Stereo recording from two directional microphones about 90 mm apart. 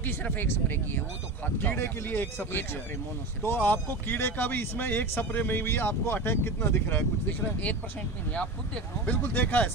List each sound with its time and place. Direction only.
0.0 s speech: 20° left (ahead or behind)
9.0 s speech: 20° left (ahead or behind)